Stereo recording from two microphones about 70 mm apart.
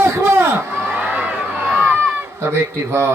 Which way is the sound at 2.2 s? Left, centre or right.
Right.